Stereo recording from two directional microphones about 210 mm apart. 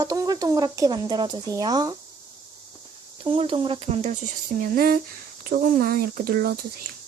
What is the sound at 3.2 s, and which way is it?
Speech, 25° right (ahead or behind).